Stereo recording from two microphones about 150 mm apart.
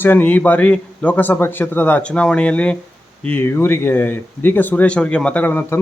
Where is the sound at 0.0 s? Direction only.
10° left (ahead or behind).